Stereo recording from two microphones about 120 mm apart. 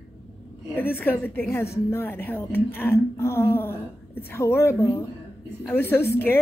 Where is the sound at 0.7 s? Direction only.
15° left (ahead or behind).